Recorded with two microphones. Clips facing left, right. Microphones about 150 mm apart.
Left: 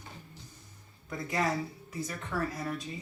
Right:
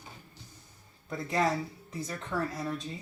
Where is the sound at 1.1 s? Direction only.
25° right (ahead or behind).